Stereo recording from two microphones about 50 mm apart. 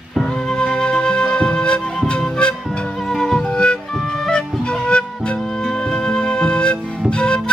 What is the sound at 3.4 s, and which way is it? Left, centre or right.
Music, left.